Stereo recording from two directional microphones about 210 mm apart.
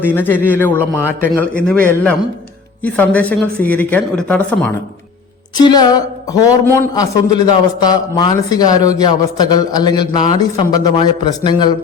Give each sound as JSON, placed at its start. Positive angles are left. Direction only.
{"t": 0.1, "sound": "speech", "side_deg": 10}
{"t": 5.5, "sound": "a man's voice", "side_deg": 20}